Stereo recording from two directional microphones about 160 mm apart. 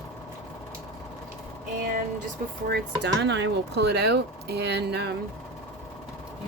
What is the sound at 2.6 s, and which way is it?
Speech, 90° right.